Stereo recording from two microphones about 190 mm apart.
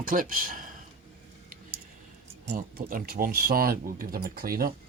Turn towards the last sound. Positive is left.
turn(degrees=-50)  # may be behind; listen again after turning